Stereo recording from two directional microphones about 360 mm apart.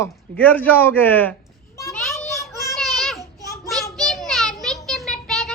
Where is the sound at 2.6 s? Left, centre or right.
Centre.